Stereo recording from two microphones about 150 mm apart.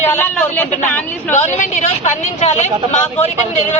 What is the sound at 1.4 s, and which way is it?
A woman's voice, 55° left (ahead or behind).